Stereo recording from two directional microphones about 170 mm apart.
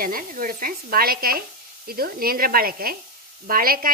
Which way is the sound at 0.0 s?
55° right (ahead or behind).